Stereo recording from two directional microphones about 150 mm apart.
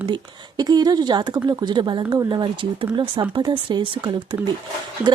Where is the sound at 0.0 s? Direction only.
30° right (ahead or behind).